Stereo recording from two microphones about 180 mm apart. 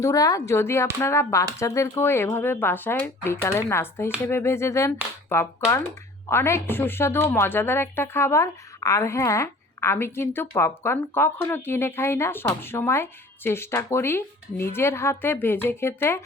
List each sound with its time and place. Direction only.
0.0 s speech: 20° left (ahead or behind)